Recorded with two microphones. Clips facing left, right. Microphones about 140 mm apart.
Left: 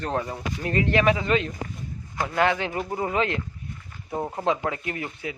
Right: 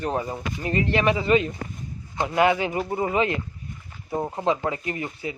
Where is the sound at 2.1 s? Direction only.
20° right (ahead or behind).